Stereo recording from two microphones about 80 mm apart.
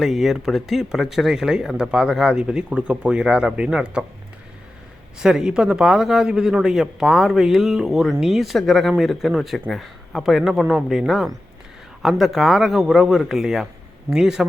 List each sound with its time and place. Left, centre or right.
0.0 s speech: centre
5.2 s speech: centre